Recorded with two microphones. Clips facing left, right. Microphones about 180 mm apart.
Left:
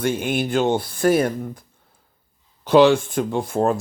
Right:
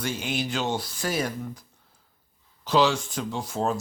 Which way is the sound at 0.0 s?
55° left (ahead or behind).